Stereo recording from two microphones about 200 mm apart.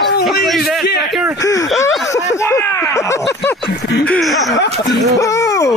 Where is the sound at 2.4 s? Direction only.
15° left (ahead or behind).